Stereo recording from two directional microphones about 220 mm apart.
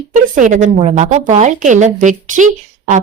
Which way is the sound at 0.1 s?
35° right (ahead or behind).